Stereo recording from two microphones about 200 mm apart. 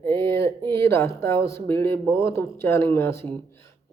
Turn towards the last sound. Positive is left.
turn(degrees=10)  # may be behind; listen again after turning